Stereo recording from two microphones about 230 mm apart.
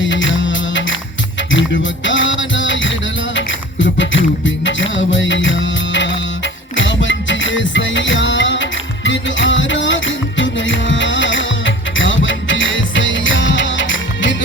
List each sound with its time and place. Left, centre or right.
0.0 s music: left
3.9 s music: left